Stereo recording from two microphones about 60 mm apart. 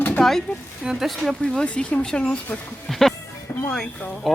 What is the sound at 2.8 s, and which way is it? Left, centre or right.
Music, centre.